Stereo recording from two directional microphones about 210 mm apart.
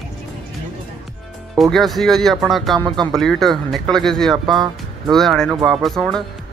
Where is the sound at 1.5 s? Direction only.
Centre (ahead or behind).